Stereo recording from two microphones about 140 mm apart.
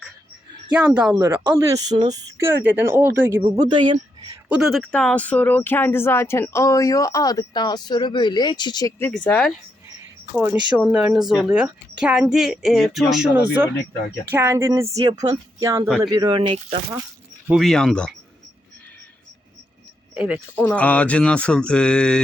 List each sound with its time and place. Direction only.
0.7 s a woman's voice: 10° right (ahead or behind); by 2.5 s 25° right (ahead or behind)
2.6 s a woman's voice: 15° right (ahead or behind)
3.5 s speech: 30° right (ahead or behind)
4.4 s speech: 10° right (ahead or behind)
4.7 s speech: 5° left (ahead or behind); by 8.9 s 30° left (ahead or behind)
9.1 s speech: 5° left (ahead or behind)
10.3 s a woman's voice: 15° right (ahead or behind); by 16.6 s 35° right (ahead or behind)
17.5 s speech: centre (ahead or behind)
20.1 s speech: 5° right (ahead or behind)
20.6 s speech: 10° left (ahead or behind)